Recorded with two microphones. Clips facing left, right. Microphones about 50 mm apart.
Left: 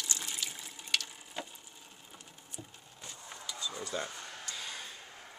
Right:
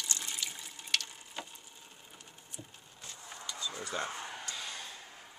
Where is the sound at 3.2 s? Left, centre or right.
Centre.